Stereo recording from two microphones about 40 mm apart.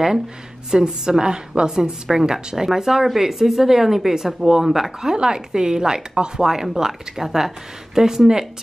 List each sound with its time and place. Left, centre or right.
0.7 s speech: centre
5.1 s speech: centre